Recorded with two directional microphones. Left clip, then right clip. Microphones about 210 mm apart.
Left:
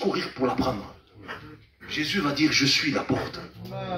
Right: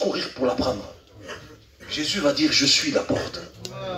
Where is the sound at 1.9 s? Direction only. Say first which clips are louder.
Right 4 dB; 25° left (ahead or behind).